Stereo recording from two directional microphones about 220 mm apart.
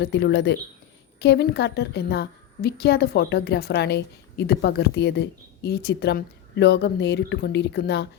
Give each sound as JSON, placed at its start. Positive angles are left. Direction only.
{"t": 0.0, "sound": "a woman's voice", "side_deg": 50}